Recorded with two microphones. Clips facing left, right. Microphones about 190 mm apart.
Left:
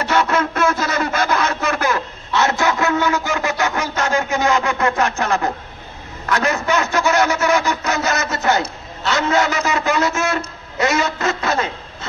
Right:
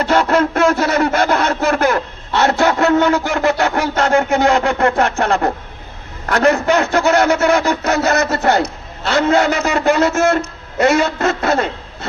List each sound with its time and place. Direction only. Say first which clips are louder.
0.1 s speech: right 4 dB; 55° right (ahead or behind)